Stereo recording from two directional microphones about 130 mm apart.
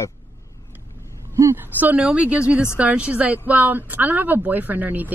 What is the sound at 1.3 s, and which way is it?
A woman's voice, 20° right (ahead or behind).